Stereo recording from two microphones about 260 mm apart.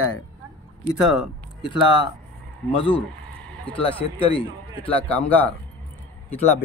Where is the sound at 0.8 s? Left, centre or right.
Centre.